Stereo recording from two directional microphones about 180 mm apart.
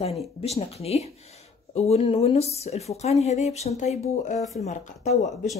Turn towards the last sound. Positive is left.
turn(degrees=40)  # may be behind; listen again after turning